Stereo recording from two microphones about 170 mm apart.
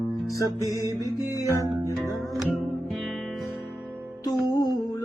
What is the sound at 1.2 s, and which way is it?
Speech, 20° left (ahead or behind).